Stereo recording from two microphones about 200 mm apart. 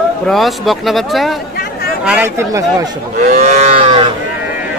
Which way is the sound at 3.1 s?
35° right (ahead or behind).